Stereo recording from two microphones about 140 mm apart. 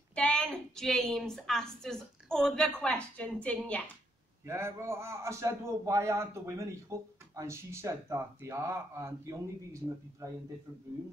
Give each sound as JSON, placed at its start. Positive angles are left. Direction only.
{"t": 0.1, "sound": "a woman's voice", "side_deg": 5}
{"t": 4.5, "sound": "a man's voice", "side_deg": -20}